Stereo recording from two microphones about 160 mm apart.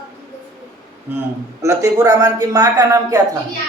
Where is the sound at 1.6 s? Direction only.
20° right (ahead or behind).